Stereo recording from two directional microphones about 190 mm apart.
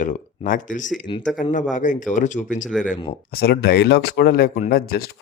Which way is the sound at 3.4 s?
60° left (ahead or behind).